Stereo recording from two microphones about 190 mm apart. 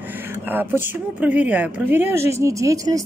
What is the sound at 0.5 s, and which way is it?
Speech, 10° right (ahead or behind).